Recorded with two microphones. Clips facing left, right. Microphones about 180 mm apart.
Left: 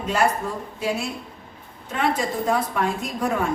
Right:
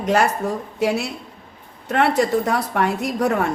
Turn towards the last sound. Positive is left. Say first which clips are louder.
# right 4 dB
turn(degrees=-70)  # may be behind; listen again after turning